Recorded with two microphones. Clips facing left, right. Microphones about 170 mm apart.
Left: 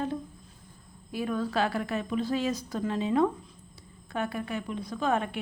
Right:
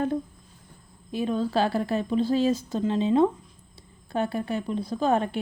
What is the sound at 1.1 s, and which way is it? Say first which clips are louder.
Speech: right 4 dB; 25° right (ahead or behind).